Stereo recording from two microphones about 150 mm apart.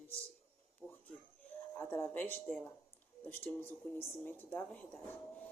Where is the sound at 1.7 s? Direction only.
15° left (ahead or behind).